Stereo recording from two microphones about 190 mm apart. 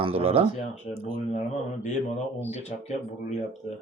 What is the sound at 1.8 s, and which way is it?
Speech, 40° left (ahead or behind).